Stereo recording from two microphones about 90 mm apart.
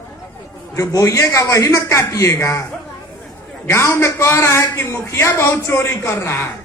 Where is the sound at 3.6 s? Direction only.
30° left (ahead or behind).